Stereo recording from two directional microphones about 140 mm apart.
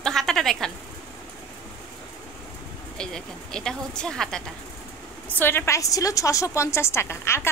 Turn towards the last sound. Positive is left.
turn(degrees=20)  # may be behind; listen again after turning